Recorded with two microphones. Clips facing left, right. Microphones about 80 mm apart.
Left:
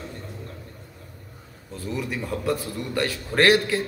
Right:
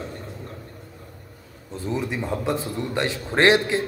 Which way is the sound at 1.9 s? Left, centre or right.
Right.